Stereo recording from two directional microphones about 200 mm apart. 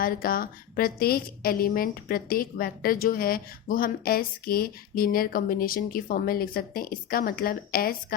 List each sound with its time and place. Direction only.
0.0 s a woman's voice: 45° left (ahead or behind)